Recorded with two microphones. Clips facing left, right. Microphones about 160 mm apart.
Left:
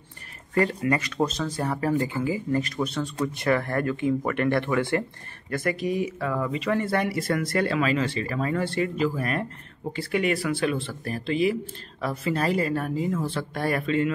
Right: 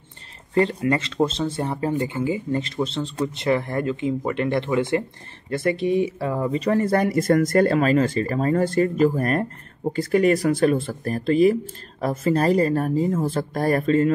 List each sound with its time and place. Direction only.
0.6 s speech: 25° right (ahead or behind); by 14.1 s 40° right (ahead or behind)